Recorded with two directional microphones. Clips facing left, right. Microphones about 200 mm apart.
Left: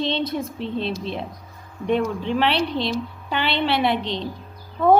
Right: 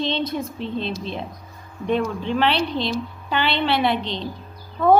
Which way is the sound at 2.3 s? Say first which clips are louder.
Right 1 dB; 5° left (ahead or behind).